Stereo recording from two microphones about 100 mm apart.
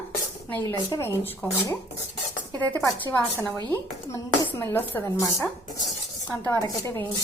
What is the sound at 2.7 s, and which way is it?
Speech, 25° left (ahead or behind).